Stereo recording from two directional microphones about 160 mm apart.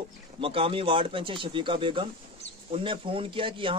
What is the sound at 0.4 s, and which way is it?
Speech, 35° right (ahead or behind).